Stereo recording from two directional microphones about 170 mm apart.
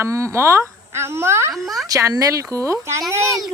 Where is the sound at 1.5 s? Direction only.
Centre (ahead or behind).